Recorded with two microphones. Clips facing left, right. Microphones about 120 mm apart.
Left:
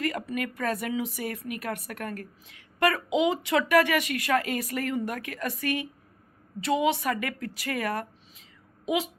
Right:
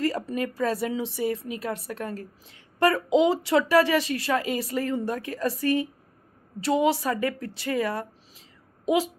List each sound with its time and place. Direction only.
0.0 s speech: 30° right (ahead or behind)